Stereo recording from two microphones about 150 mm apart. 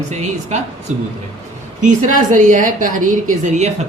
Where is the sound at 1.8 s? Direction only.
55° right (ahead or behind).